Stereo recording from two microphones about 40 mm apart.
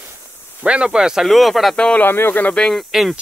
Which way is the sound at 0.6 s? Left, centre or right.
Right.